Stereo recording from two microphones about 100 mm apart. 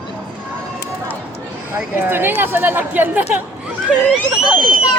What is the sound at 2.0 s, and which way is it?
A woman's voice, 20° right (ahead or behind).